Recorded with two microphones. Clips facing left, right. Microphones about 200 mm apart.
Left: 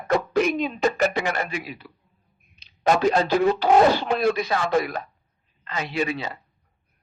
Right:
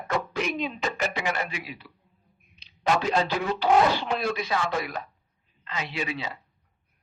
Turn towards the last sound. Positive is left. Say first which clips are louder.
# left 6 dB
turn(degrees=45)  # may be behind; listen again after turning